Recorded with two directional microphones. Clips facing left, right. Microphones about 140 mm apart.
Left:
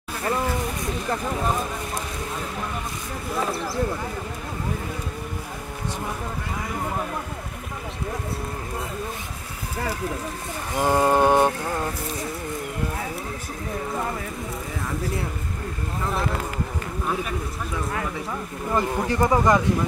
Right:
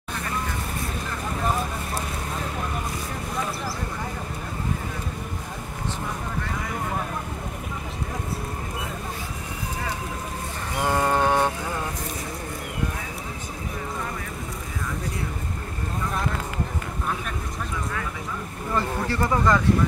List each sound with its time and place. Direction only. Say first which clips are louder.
10.8 s speech: left 3 dB; 15° left (ahead or behind)
18.7 s speech: left 3 dB; 15° left (ahead or behind)